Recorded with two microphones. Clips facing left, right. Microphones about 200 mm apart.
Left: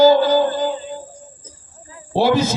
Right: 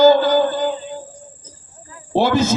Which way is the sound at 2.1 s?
50° right (ahead or behind).